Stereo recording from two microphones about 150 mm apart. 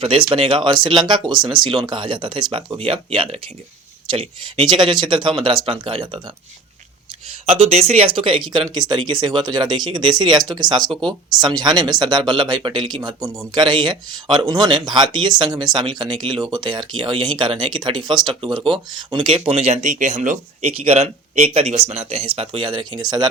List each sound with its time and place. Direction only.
0.0 s speech: 35° right (ahead or behind)
7.4 s speech: 45° right (ahead or behind)
22.4 s speech: 35° right (ahead or behind)